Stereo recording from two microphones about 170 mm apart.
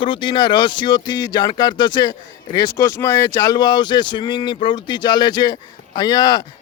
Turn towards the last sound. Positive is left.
turn(degrees=25)  # may be behind; listen again after turning